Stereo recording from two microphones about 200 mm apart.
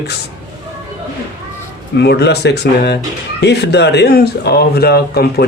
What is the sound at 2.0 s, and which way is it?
Speech, 55° left (ahead or behind).